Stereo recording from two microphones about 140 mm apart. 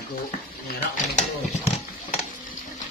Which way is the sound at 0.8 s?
55° left (ahead or behind).